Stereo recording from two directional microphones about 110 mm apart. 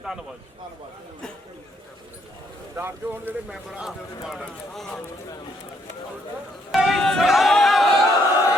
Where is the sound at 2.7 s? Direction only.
20° right (ahead or behind).